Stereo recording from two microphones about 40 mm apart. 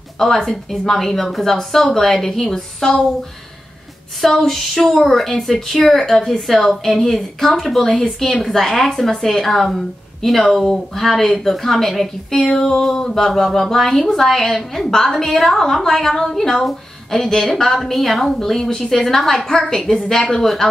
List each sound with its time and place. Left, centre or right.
0.2 s a woman's voice: centre
4.2 s a woman's voice: centre
12.4 s a sound: centre
12.8 s a woman's voice: centre
17.7 s a woman's voice: centre